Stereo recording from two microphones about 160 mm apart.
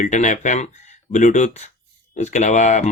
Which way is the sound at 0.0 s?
50° left (ahead or behind).